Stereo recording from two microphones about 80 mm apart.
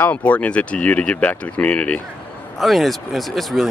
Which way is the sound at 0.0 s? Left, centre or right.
Centre.